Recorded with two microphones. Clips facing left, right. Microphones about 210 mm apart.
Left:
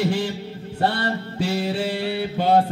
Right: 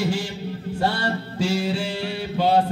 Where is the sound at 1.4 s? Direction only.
60° left (ahead or behind).